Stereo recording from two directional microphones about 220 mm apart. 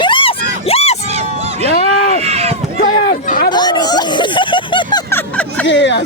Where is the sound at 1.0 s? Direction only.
30° right (ahead or behind).